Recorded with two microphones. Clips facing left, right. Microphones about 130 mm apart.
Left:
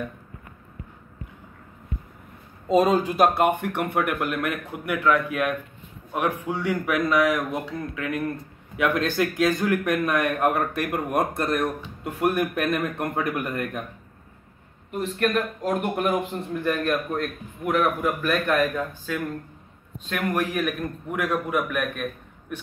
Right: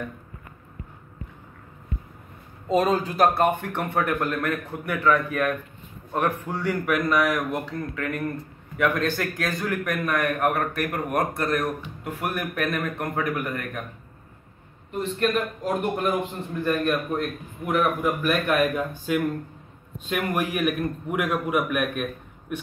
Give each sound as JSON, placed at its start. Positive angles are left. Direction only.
{"t": 2.7, "sound": "a man's voice", "side_deg": 15}
{"t": 14.9, "sound": "a man's voice", "side_deg": 5}
{"t": 15.2, "sound": "a man's voice", "side_deg": -5}
{"t": 15.8, "sound": "a man's voice", "side_deg": 5}